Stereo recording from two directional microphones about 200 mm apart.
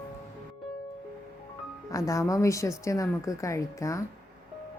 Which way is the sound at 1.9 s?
15° left (ahead or behind).